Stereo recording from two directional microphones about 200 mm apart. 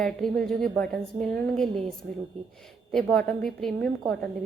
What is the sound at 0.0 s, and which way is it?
A woman's voice, centre (ahead or behind).